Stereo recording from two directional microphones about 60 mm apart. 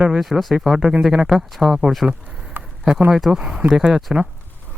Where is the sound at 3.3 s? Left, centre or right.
Centre.